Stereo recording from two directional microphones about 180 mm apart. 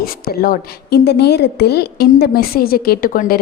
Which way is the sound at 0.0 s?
55° left (ahead or behind).